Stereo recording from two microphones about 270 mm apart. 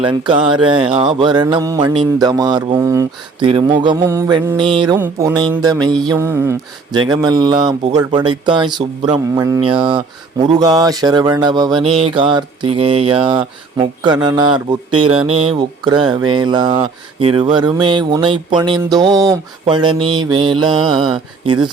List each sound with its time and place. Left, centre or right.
0.0 s speech: centre